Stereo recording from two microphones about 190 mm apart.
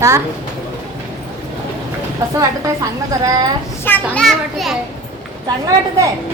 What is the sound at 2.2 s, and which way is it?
Speech, 15° right (ahead or behind).